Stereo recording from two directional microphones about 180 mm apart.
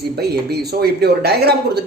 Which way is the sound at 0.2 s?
60° right (ahead or behind).